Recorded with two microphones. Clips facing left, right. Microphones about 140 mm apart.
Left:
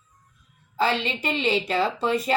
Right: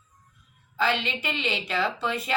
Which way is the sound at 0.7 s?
35° left (ahead or behind).